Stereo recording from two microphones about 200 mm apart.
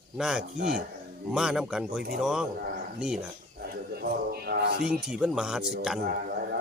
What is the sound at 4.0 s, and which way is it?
Music, 50° right (ahead or behind).